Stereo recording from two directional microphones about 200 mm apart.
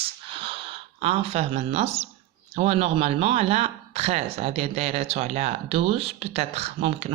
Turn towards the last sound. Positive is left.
turn(degrees=-30)  # may be behind; listen again after turning